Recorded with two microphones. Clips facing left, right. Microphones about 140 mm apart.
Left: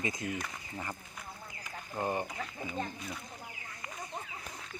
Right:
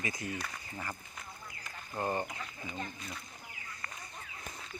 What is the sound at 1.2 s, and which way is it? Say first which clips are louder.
Duck: left 2 dB; 10° left (ahead or behind).